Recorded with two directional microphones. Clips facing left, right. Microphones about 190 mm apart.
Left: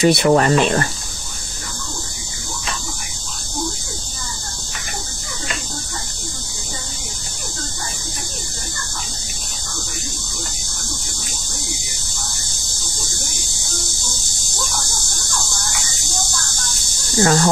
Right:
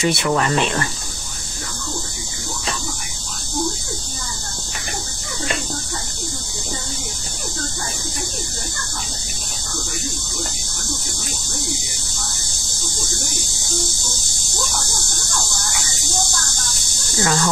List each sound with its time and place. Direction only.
0.0 s speech: 35° left (ahead or behind)
17.2 s speech: 40° left (ahead or behind)